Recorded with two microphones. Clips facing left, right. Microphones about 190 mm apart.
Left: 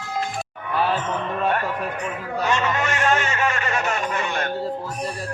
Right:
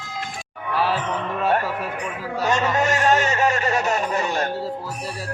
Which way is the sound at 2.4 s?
40° right (ahead or behind).